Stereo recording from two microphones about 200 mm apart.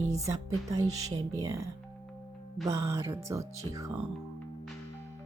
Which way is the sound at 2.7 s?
15° right (ahead or behind).